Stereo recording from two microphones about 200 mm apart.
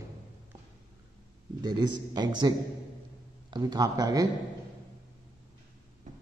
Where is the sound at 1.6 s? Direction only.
20° right (ahead or behind).